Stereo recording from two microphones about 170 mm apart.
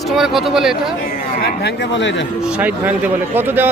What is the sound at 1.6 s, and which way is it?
Speech, 85° left.